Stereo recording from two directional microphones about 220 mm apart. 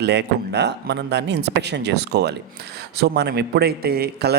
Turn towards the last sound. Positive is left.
turn(degrees=-45)  # may be behind; listen again after turning